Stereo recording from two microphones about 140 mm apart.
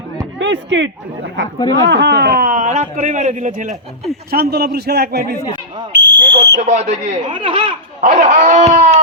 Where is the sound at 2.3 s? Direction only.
85° right; by 3.8 s 65° right (ahead or behind).